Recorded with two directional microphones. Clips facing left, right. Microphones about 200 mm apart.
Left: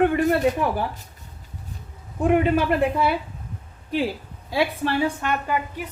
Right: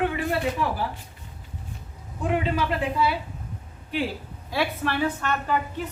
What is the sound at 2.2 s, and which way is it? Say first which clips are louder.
Speech: left 6 dB; 55° left (ahead or behind).